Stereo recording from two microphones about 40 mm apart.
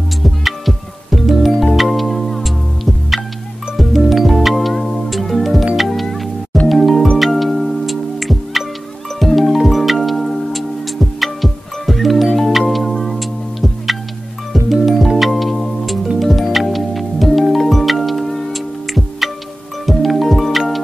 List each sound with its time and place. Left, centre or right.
0.2 s music: centre